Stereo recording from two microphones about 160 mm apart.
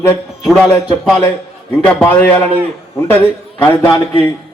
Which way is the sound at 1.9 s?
10° left (ahead or behind).